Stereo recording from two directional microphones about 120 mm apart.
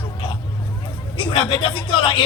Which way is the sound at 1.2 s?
45° left (ahead or behind).